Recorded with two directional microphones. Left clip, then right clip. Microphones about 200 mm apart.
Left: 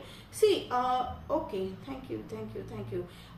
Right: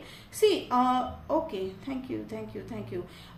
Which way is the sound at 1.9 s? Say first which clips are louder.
Right 5 dB; 40° right (ahead or behind).